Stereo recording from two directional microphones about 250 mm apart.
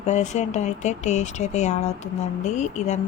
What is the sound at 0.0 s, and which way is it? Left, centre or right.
Speech, left.